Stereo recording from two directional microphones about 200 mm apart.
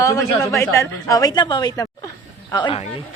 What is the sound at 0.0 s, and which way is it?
Speech, 15° left (ahead or behind).